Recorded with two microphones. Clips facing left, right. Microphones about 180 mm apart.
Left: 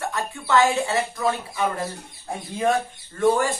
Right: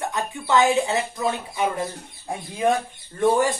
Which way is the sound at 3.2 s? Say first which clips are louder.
Right 1 dB; 20° right (ahead or behind).